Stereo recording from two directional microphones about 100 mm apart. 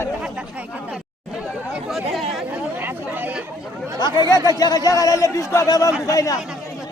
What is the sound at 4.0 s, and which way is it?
Speech, 45° left (ahead or behind).